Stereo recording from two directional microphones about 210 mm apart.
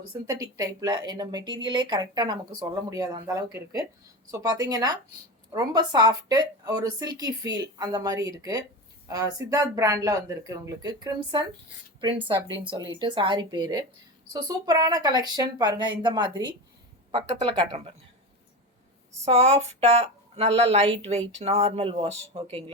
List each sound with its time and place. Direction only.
0.3 s a woman's voice: 15° right (ahead or behind)
13.0 s a woman's voice: 20° right (ahead or behind)
19.2 s a woman's voice: 30° right (ahead or behind)